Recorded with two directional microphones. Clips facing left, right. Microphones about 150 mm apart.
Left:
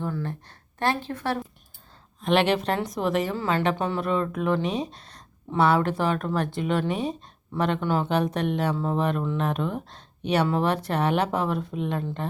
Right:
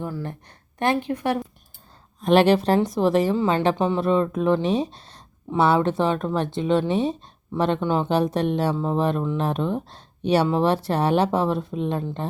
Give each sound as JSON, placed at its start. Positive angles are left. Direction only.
{"t": 0.0, "sound": "speech", "side_deg": -15}
{"t": 2.2, "sound": "speech", "side_deg": -40}